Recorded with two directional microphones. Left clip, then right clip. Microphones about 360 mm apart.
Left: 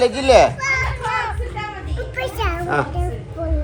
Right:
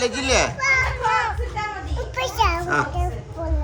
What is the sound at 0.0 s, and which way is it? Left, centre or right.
Speech, centre.